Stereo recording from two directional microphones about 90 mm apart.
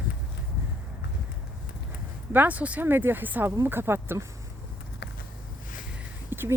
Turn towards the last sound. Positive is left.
turn(degrees=-25)  # may be behind; listen again after turning